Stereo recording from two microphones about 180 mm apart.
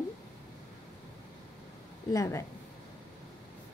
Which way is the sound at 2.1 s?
15° left (ahead or behind).